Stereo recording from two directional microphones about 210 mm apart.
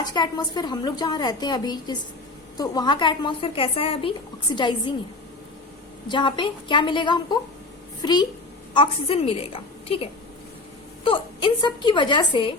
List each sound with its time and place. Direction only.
0.0 s a woman's voice: 20° left (ahead or behind)
6.1 s a woman's voice: 20° left (ahead or behind)